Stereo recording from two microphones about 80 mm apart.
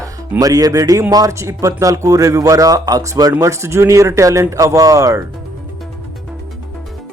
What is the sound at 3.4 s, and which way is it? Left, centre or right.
Speech, right.